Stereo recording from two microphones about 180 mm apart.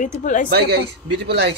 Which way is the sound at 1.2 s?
70° right (ahead or behind).